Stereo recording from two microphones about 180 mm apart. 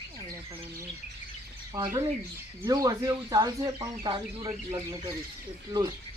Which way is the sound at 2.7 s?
20° right (ahead or behind).